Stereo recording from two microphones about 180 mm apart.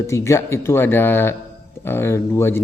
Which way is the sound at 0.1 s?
15° left (ahead or behind).